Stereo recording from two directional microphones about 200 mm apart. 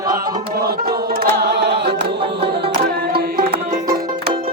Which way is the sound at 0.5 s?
50° right (ahead or behind).